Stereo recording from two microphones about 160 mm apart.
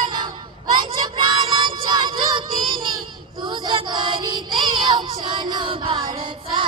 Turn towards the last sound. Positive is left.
turn(degrees=-30)  # may be behind; listen again after turning